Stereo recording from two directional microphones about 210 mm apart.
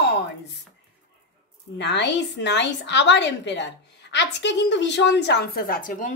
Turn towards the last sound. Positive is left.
turn(degrees=40)  # may be behind; listen again after turning